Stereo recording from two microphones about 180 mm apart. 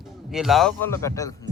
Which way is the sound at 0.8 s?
15° left (ahead or behind).